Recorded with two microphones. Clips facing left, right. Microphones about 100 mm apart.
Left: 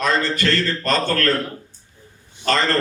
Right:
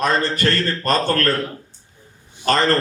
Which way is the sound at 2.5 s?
35° right (ahead or behind).